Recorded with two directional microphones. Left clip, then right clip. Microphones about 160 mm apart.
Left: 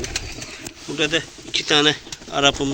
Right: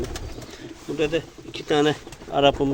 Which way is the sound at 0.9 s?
5° right (ahead or behind).